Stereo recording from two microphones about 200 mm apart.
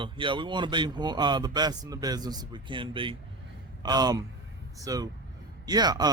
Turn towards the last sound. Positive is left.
turn(degrees=-20)  # may be behind; listen again after turning